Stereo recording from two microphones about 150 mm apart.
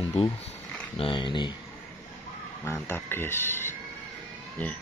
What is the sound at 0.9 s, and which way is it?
Speech, 35° left (ahead or behind).